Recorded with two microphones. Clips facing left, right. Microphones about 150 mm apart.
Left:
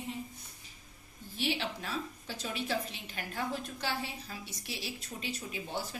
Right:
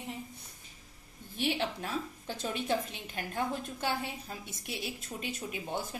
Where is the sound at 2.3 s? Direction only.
50° right (ahead or behind).